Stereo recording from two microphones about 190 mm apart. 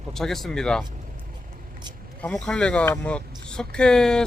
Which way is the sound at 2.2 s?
5° left (ahead or behind).